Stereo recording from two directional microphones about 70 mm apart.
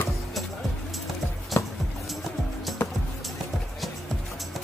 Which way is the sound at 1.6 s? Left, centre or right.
Left.